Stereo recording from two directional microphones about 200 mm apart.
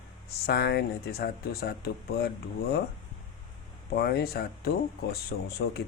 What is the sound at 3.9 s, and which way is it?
Speech, 50° left (ahead or behind).